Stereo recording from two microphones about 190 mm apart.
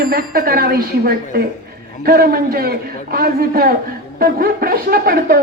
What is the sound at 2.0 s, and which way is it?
A woman's voice, 55° right (ahead or behind).